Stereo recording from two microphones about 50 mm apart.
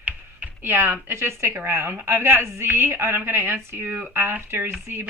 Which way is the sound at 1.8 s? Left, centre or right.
Right.